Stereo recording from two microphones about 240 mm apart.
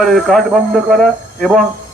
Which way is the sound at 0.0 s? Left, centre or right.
Centre.